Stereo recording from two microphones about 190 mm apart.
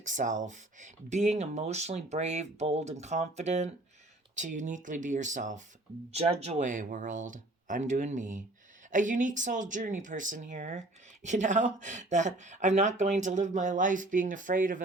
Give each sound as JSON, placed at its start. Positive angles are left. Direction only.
{"t": 0.0, "sound": "speech", "side_deg": -40}